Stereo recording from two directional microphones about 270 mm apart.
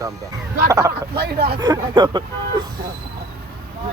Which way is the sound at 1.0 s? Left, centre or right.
Right.